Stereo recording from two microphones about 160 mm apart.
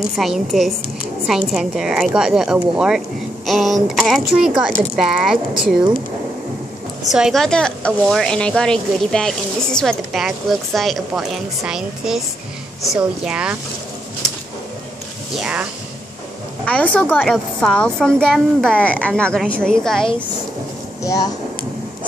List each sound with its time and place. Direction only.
0.1 s speech: centre (ahead or behind)
7.1 s speech: centre (ahead or behind)
15.3 s speech: 5° right (ahead or behind)
16.6 s a woman's voice: 10° left (ahead or behind)
21.0 s speech: 20° left (ahead or behind)